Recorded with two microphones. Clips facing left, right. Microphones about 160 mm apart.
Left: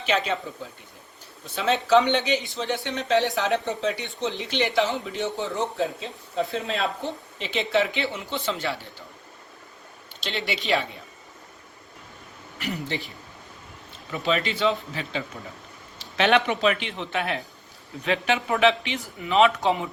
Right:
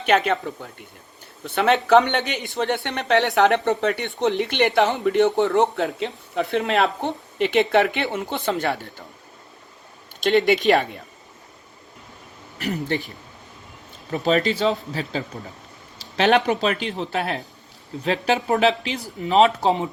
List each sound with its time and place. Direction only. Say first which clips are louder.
0.0 s speech: right 6 dB; 60° right (ahead or behind)
10.2 s speech: right 13 dB; 50° right (ahead or behind)
12.5 s speech: right 5 dB; 40° right (ahead or behind)
14.1 s speech: right 5 dB; 40° right (ahead or behind)